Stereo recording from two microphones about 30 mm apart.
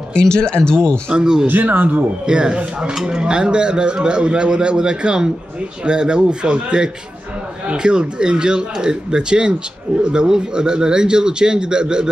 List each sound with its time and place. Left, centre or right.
0.1 s speech: left
1.1 s a man's voice: right
1.5 s speech: right
2.2 s a man's voice: right